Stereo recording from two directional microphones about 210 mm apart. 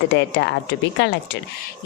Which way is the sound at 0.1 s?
55° left (ahead or behind).